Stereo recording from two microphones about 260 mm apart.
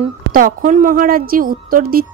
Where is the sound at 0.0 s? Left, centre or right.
Right.